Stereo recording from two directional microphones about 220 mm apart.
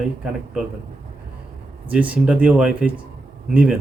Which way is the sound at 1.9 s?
5° right (ahead or behind).